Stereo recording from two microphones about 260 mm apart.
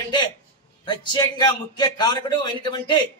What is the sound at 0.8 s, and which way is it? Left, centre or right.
A man's voice, centre.